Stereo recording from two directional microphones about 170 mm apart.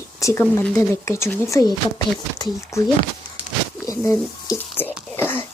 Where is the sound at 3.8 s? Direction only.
20° left (ahead or behind).